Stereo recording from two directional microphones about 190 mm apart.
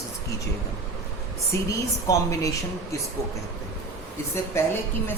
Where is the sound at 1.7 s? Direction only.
15° left (ahead or behind).